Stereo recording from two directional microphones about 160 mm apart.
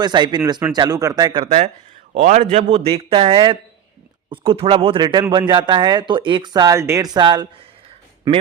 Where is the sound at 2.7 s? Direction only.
40° right (ahead or behind).